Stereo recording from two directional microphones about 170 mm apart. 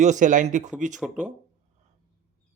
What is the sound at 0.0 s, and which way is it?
Speech, 45° right (ahead or behind).